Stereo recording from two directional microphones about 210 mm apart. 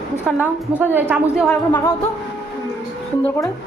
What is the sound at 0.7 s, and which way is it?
Speech, 10° right (ahead or behind).